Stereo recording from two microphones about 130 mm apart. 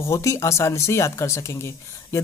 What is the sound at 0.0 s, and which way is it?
Speech, 20° left (ahead or behind).